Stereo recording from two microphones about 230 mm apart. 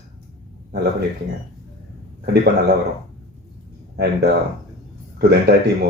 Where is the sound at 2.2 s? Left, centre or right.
Right.